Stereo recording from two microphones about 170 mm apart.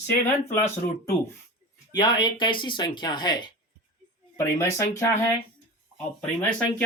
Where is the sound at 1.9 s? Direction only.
25° left (ahead or behind).